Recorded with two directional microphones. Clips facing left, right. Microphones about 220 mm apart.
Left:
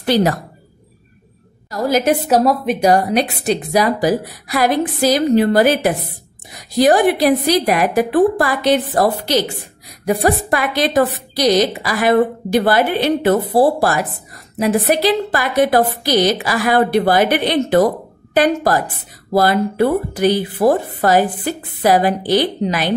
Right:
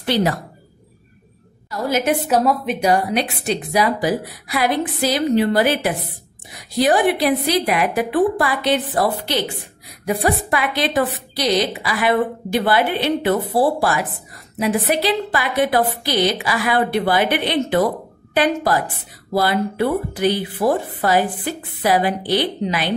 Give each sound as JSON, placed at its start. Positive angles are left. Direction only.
{"t": 0.0, "sound": "a woman's voice", "side_deg": 40}
{"t": 1.7, "sound": "a woman's voice", "side_deg": 40}